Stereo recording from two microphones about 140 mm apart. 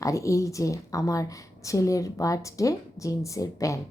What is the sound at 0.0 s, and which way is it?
A woman's voice, 20° left (ahead or behind).